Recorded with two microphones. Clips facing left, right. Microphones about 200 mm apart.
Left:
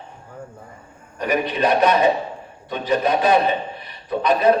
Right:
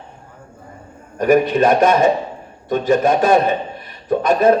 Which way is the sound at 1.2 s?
45° right (ahead or behind).